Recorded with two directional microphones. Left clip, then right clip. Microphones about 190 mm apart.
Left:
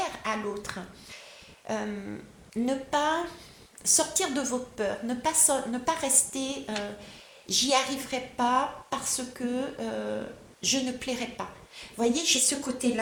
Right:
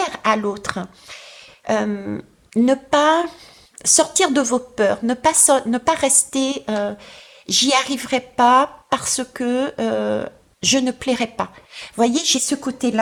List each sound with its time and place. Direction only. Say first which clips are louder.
0.0 s a woman's voice: right 12 dB; 45° right (ahead or behind)